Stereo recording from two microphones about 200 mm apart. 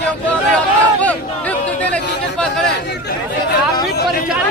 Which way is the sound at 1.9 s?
5° left (ahead or behind).